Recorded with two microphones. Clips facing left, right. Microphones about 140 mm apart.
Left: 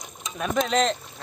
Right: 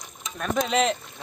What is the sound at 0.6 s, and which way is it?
Speech, 5° right (ahead or behind).